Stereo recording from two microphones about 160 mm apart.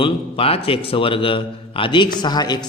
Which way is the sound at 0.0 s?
35° left (ahead or behind).